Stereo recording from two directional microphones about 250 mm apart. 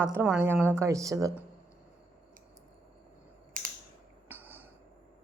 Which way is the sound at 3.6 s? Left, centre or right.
Right.